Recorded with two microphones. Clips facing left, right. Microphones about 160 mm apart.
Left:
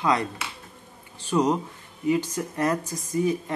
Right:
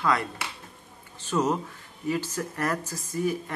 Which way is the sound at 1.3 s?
15° left (ahead or behind).